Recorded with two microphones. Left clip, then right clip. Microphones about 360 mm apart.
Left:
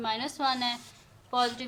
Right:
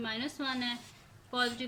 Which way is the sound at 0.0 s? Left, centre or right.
Centre.